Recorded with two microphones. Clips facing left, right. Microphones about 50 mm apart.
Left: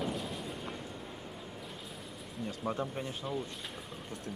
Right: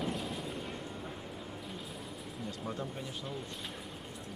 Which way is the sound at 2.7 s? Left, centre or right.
Left.